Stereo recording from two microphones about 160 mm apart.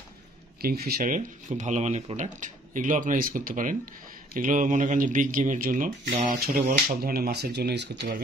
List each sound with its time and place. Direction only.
0.6 s speech: 75° right (ahead or behind); by 8.2 s 90° right